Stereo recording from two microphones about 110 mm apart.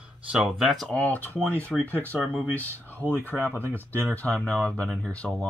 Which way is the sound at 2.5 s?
15° left (ahead or behind).